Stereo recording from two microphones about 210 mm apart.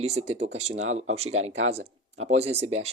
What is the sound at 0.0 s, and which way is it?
Speech, 30° right (ahead or behind).